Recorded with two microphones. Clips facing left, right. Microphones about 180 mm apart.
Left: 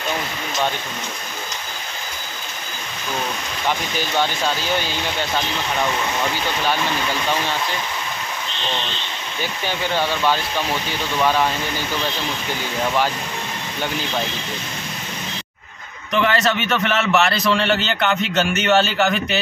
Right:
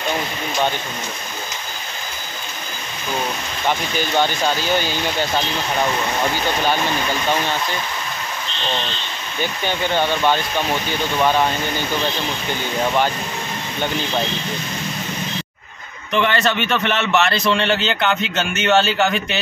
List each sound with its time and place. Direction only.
4.7 s a man's voice: centre (ahead or behind)
16.2 s a man's voice: centre (ahead or behind)